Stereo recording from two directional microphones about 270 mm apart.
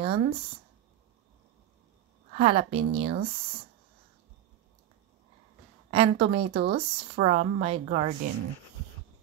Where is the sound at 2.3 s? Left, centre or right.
Right.